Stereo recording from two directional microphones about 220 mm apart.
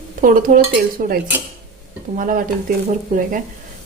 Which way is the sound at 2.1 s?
35° right (ahead or behind).